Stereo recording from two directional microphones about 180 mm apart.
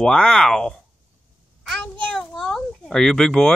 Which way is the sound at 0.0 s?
5° left (ahead or behind).